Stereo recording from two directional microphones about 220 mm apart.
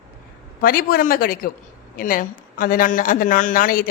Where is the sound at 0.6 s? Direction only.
40° left (ahead or behind).